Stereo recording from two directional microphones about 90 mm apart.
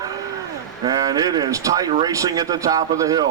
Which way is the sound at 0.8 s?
45° right (ahead or behind).